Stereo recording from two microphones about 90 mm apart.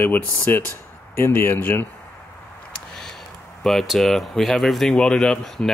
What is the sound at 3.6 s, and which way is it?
Speech, 5° left (ahead or behind).